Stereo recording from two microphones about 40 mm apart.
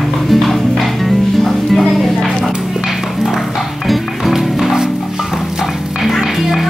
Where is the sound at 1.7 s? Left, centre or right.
Centre.